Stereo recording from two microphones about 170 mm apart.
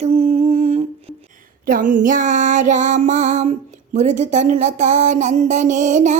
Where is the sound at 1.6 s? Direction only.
55° right (ahead or behind).